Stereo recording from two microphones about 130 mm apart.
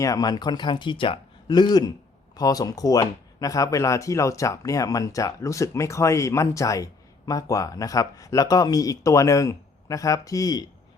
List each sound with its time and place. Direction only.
0.0 s speech: 25° left (ahead or behind)